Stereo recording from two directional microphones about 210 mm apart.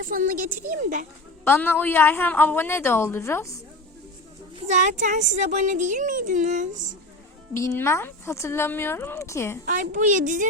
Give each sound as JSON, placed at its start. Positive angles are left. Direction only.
{"t": 0.0, "sound": "speech", "side_deg": -40}
{"t": 1.5, "sound": "a woman's voice", "side_deg": 10}
{"t": 4.7, "sound": "speech", "side_deg": -35}
{"t": 7.5, "sound": "a woman's voice", "side_deg": 15}
{"t": 9.6, "sound": "speech", "side_deg": -40}